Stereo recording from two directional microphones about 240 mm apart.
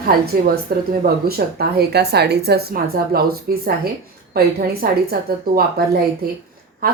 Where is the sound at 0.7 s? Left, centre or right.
Right.